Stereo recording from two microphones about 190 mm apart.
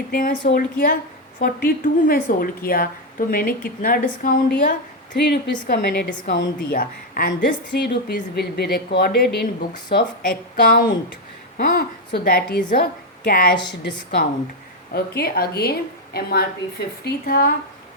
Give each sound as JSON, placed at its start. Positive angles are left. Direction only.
{"t": 0.1, "sound": "a woman's voice", "side_deg": 55}
{"t": 5.1, "sound": "a woman's voice", "side_deg": 65}
{"t": 6.2, "sound": "a woman's voice", "side_deg": 70}
{"t": 6.7, "sound": "a woman's voice", "side_deg": 50}
{"t": 13.7, "sound": "a woman's voice", "side_deg": 65}